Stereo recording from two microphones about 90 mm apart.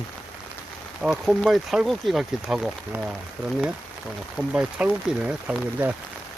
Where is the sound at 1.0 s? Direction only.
Centre (ahead or behind).